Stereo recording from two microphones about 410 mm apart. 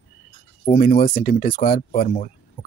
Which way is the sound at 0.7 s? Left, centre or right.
Centre.